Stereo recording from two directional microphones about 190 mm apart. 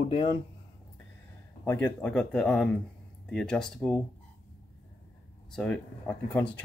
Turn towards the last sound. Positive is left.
turn(degrees=10)  # may be behind; listen again after turning